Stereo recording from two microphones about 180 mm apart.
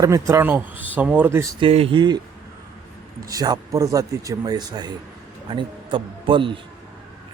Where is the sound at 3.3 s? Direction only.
20° right (ahead or behind).